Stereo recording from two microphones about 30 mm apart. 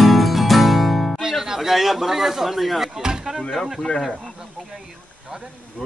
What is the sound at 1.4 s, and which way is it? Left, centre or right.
Speech, centre.